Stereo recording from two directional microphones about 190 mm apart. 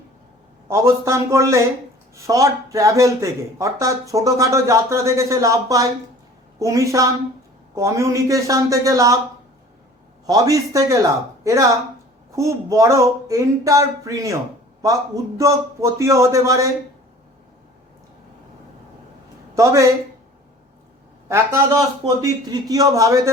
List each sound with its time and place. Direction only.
0.7 s speech: 15° right (ahead or behind)
10.2 s speech: 20° right (ahead or behind)
19.5 s speech: 15° right (ahead or behind)
21.2 s speech: 15° right (ahead or behind)